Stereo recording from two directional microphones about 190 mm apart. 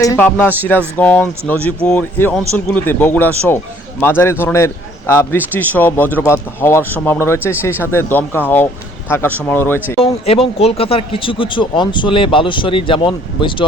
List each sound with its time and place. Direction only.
0.0 s a man's voice: 15° left (ahead or behind)
10.0 s speech: 30° left (ahead or behind)